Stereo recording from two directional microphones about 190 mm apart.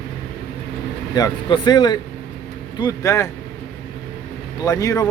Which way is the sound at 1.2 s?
20° left (ahead or behind).